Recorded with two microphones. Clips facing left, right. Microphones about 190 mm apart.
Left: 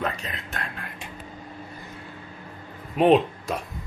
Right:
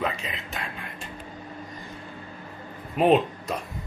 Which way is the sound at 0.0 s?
Centre (ahead or behind).